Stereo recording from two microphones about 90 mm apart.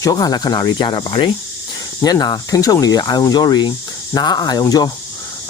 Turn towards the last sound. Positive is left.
turn(degrees=45)  # may be behind; listen again after turning